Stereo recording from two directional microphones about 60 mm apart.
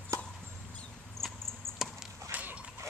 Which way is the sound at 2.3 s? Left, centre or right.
Right.